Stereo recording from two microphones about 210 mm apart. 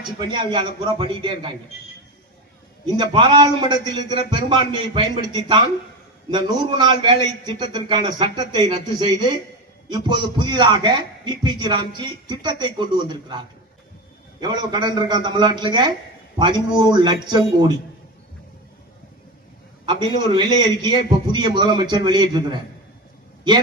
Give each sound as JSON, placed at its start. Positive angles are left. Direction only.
{"t": 0.2, "sound": "a man's voice", "side_deg": -20}
{"t": 2.8, "sound": "a man's voice", "side_deg": -20}
{"t": 14.4, "sound": "a man's voice", "side_deg": -20}
{"t": 19.8, "sound": "a man's voice", "side_deg": -20}